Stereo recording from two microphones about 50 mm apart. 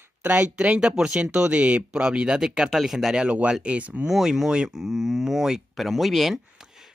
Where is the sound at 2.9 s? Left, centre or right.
Centre.